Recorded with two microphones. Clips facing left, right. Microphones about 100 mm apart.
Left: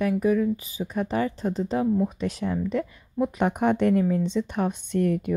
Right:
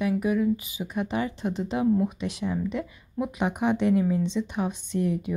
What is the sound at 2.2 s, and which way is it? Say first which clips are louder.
Speech: left 2 dB; 45° left (ahead or behind).